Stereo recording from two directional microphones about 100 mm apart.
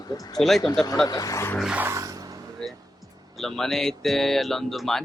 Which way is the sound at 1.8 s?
30° right (ahead or behind).